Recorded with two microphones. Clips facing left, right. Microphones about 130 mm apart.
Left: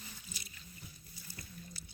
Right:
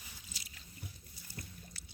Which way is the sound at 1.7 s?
90° right.